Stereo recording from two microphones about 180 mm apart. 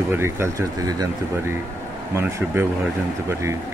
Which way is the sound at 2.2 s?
15° right (ahead or behind).